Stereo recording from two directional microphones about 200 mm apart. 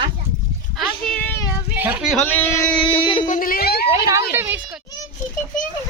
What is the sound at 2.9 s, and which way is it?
Speech, 25° left (ahead or behind).